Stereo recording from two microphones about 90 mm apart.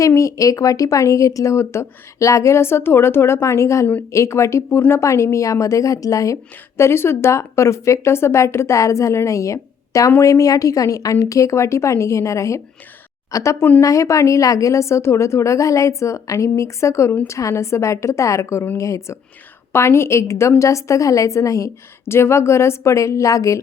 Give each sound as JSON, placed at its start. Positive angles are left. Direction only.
{"t": 0.0, "sound": "speech", "side_deg": 35}
{"t": 13.6, "sound": "speech", "side_deg": 20}
{"t": 13.8, "sound": "speech", "side_deg": 35}